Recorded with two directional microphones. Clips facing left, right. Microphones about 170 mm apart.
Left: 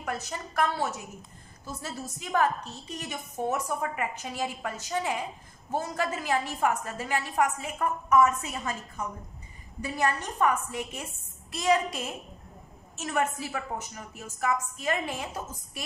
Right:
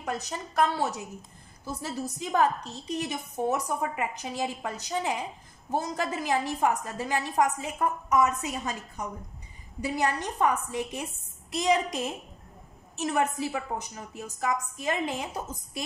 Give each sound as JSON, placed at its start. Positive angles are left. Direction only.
{"t": 0.0, "sound": "a woman's voice", "side_deg": -15}
{"t": 2.3, "sound": "a woman's voice", "side_deg": -15}